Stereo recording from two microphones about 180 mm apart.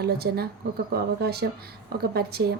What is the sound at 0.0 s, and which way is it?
A woman's voice, 60° right (ahead or behind).